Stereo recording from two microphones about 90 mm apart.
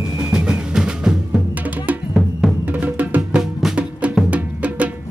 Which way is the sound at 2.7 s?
15° right (ahead or behind).